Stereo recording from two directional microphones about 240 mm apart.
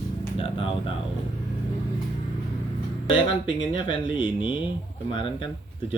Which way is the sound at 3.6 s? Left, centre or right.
Left.